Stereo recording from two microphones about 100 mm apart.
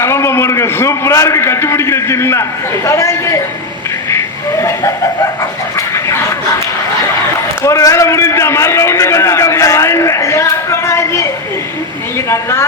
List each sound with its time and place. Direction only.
0.0 s a man's voice: 25° left (ahead or behind)
7.6 s a man's voice: 30° left (ahead or behind)
12.3 s a man's voice: 25° left (ahead or behind)